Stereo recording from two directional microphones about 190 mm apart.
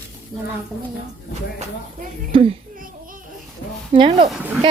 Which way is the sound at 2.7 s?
45° right (ahead or behind).